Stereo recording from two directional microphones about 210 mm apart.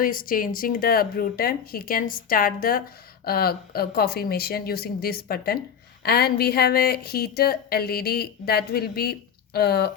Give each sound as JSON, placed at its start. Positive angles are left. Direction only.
{"t": 0.0, "sound": "a woman's voice", "side_deg": 40}